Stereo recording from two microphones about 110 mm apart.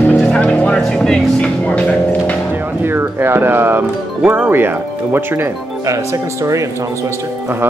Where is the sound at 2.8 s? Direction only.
20° right (ahead or behind).